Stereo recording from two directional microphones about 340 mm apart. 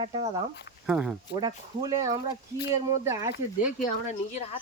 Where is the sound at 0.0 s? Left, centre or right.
Centre.